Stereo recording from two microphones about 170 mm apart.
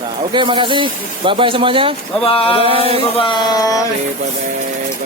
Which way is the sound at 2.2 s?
35° left (ahead or behind).